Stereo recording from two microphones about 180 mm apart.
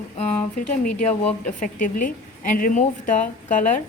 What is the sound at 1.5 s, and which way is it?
A woman's voice, 45° left (ahead or behind).